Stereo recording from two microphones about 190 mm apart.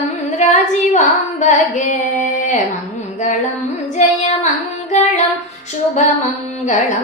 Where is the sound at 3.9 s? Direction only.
40° left (ahead or behind).